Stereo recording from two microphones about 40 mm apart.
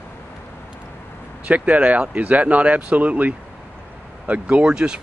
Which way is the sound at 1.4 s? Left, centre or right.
Right.